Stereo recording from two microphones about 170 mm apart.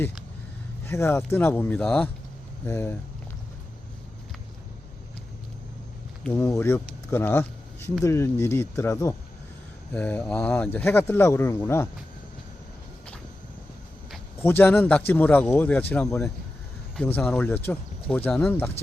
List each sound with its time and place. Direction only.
0.9 s speech: 15° left (ahead or behind)
6.2 s speech: 15° left (ahead or behind)
14.3 s speech: 10° left (ahead or behind)